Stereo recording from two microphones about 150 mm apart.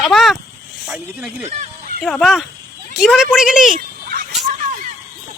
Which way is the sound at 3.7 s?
90° right.